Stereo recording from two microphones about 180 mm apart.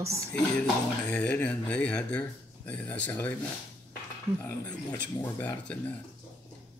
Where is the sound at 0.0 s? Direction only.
15° right (ahead or behind).